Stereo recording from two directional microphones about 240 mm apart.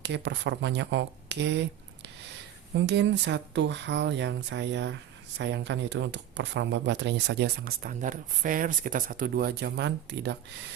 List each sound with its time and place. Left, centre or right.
0.0 s speech: right